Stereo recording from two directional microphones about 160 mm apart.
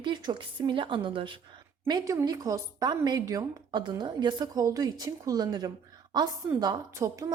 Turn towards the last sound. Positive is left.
turn(degrees=-20)  # may be behind; listen again after turning